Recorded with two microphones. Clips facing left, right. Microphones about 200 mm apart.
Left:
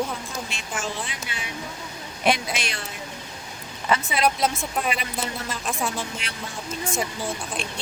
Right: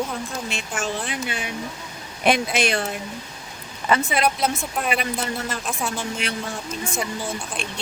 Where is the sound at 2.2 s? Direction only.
55° right (ahead or behind).